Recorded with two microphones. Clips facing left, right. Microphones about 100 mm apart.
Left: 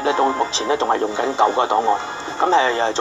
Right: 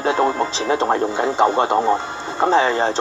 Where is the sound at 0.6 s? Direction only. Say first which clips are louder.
Right 1 dB; 15° right (ahead or behind).